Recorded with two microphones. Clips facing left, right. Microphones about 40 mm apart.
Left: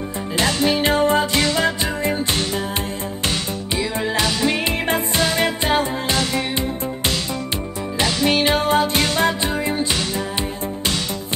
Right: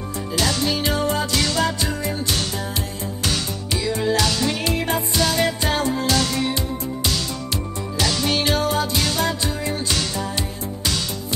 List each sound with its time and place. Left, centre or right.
0.4 s music: left
4.0 s music: left
8.0 s music: left